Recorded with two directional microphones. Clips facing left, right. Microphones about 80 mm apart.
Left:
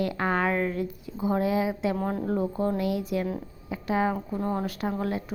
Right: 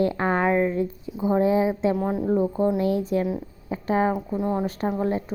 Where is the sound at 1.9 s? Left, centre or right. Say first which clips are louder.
Right 5 dB; centre.